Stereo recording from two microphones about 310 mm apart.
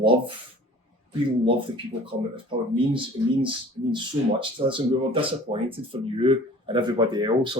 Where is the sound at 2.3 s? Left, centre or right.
Centre.